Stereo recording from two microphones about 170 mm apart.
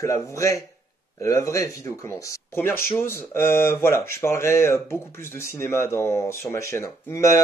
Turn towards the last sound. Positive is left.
turn(degrees=20)  # may be behind; listen again after turning